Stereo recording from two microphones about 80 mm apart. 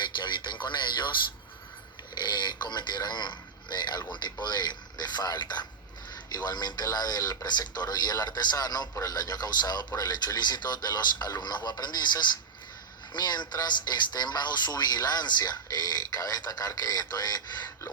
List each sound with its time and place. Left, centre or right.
0.0 s speech: left